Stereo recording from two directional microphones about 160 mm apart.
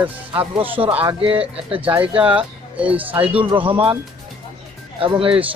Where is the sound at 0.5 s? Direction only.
35° right (ahead or behind).